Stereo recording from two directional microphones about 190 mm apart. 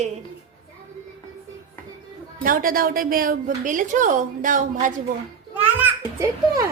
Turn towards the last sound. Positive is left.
turn(degrees=-10)  # may be behind; listen again after turning